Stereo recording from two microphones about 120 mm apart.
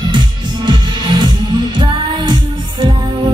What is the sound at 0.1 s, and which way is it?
Music, 40° right (ahead or behind).